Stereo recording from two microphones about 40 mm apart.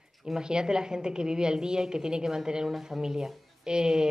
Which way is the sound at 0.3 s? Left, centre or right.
Centre.